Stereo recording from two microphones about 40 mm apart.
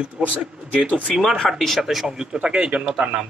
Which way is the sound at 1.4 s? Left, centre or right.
Centre.